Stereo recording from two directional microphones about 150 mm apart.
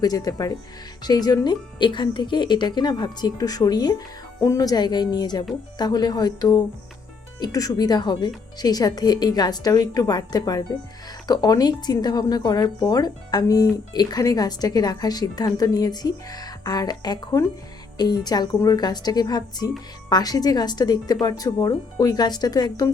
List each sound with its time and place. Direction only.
0.0 s speech: 25° left (ahead or behind)